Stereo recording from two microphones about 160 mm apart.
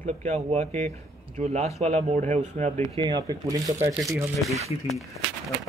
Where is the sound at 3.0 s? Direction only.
25° right (ahead or behind).